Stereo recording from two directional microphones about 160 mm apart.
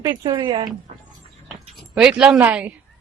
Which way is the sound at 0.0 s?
20° right (ahead or behind).